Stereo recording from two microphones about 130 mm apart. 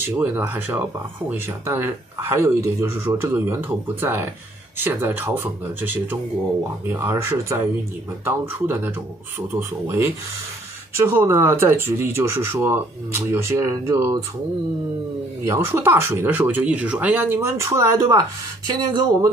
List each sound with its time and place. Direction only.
0.2 s speech: 15° right (ahead or behind)
15.4 s speech: 20° right (ahead or behind)